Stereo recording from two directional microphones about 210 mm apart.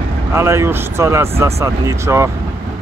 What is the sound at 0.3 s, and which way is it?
Speech, 10° right (ahead or behind).